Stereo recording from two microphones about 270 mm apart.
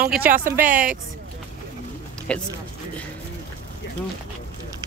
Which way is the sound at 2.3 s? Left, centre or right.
Centre.